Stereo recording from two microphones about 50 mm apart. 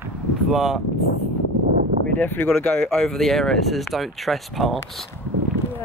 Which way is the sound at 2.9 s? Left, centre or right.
Centre.